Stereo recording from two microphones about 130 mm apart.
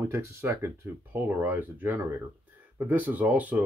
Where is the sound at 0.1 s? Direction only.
20° right (ahead or behind).